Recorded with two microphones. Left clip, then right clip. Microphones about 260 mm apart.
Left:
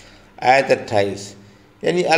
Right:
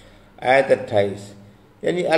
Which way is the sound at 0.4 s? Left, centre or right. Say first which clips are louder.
Left 2 dB; left.